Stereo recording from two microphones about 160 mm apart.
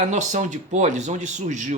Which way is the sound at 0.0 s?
50° right (ahead or behind).